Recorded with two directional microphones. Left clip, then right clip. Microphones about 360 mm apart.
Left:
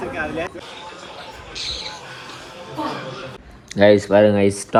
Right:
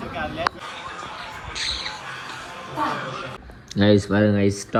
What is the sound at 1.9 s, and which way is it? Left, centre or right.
Music, centre.